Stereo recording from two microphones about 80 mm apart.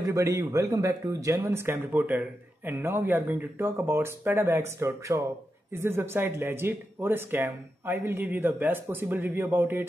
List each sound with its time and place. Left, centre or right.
0.0 s speech: right